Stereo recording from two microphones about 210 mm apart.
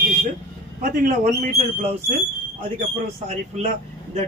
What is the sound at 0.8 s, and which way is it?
Speech, 40° right (ahead or behind).